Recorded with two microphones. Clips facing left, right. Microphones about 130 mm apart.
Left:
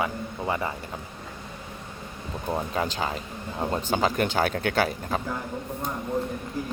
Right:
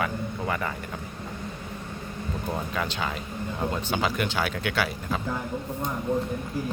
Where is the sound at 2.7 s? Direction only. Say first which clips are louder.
Left 2 dB; 30° left (ahead or behind).